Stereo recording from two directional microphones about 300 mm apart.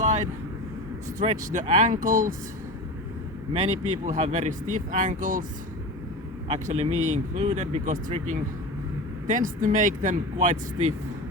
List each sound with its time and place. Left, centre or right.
0.0 s vehicle: right
1.2 s speech: right
4.0 s speech: right
6.5 s speech: right